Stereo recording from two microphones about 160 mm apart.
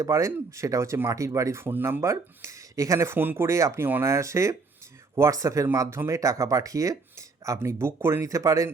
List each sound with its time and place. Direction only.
0.0 s speech: 20° right (ahead or behind)